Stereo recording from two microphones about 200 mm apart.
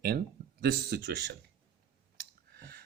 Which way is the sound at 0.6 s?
55° right (ahead or behind).